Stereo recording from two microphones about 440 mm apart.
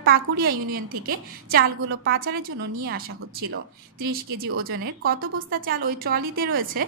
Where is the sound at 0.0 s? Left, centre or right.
Centre.